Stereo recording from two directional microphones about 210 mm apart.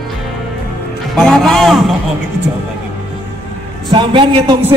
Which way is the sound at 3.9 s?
25° right (ahead or behind).